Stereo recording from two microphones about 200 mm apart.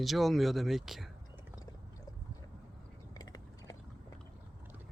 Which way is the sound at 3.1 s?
20° left (ahead or behind).